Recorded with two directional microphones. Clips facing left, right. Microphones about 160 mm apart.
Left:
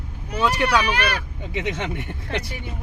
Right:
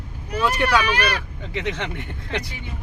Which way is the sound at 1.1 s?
10° left (ahead or behind).